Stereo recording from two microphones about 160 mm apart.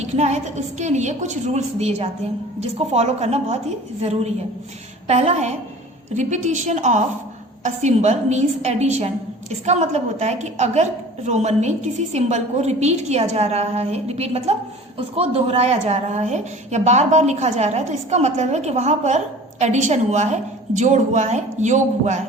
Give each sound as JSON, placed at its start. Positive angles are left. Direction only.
{"t": 0.0, "sound": "a woman's voice", "side_deg": -45}